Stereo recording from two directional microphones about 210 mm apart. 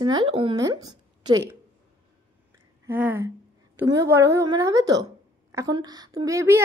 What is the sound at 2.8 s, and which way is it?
Speech, 10° right (ahead or behind).